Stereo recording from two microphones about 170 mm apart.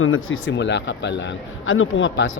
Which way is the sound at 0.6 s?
90° left.